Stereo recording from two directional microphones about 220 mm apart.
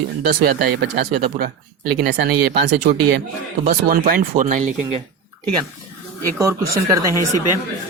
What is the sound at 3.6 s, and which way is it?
Speech, 40° right (ahead or behind).